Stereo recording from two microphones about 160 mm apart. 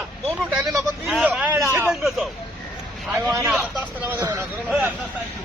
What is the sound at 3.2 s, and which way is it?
Speech, 15° right (ahead or behind).